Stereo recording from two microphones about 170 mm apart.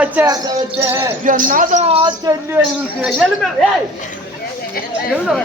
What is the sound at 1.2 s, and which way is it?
Speech, 50° right (ahead or behind).